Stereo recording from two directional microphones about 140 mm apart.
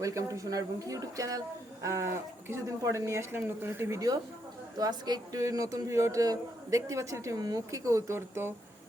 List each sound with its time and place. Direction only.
0.0 s a man's voice: 20° right (ahead or behind)